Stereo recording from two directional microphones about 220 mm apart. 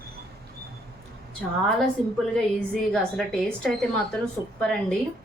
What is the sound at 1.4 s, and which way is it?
A woman's voice, centre (ahead or behind).